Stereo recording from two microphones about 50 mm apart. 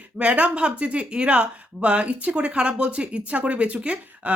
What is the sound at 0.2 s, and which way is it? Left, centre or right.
Speech, right.